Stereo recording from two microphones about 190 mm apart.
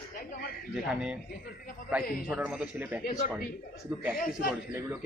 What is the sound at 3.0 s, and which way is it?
Speech, 45° left (ahead or behind).